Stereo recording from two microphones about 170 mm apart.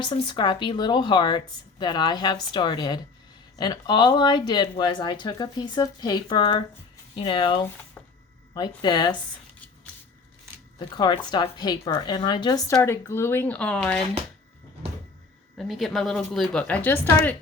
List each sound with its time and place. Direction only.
0.0 s speech: 25° left (ahead or behind)
10.8 s speech: 25° left (ahead or behind)
12.6 s speech: 15° left (ahead or behind)
15.5 s a woman's voice: centre (ahead or behind)